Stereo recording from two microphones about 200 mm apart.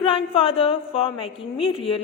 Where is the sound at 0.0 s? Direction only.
25° left (ahead or behind).